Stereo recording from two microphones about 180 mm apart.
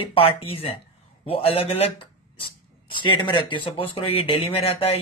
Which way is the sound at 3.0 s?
25° left (ahead or behind).